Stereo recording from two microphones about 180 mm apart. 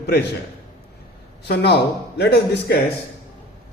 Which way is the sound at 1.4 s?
65° left (ahead or behind).